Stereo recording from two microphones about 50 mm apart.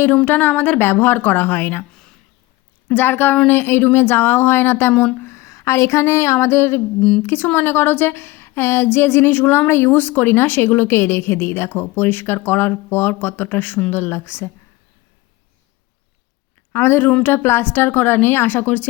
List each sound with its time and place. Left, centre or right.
0.3 s speech: left
0.8 s speech: left
2.9 s a woman's voice: left
5.2 s speech: left
7.3 s a woman's voice: left
16.7 s a woman's voice: left